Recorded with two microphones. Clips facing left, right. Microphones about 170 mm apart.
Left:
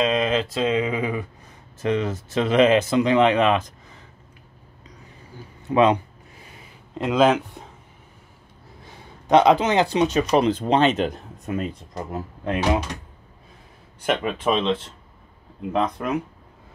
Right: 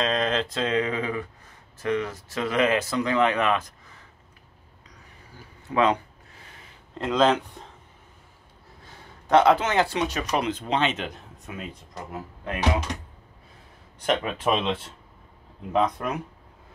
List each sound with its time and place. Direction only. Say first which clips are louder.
0.0 s speech: left 4 dB; 5° left (ahead or behind)
5.7 s speech: left 5 dB; 20° left (ahead or behind)
9.3 s speech: left 3 dB; 15° left (ahead or behind)
10.3 s speech: left 6 dB; 35° left (ahead or behind)
14.0 s speech: left 2 dB; centre (ahead or behind)
15.7 s speech: left 1 dB; centre (ahead or behind)